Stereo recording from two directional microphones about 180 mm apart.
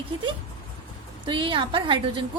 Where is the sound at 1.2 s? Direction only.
25° right (ahead or behind).